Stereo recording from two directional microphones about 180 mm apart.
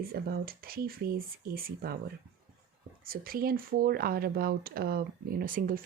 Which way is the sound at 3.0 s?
55° right (ahead or behind).